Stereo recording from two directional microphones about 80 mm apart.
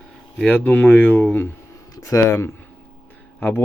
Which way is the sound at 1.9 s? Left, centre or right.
Left.